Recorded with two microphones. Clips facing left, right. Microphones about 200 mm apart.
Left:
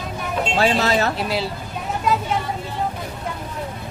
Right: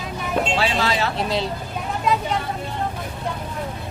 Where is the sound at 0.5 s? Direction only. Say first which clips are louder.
Left 3 dB; 45° left (ahead or behind).